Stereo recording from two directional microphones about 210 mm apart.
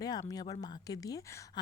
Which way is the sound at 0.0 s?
15° left (ahead or behind).